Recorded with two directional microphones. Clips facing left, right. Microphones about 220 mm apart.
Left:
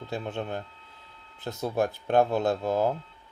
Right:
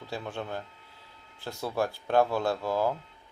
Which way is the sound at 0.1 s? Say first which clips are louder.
Left 3 dB; 20° left (ahead or behind).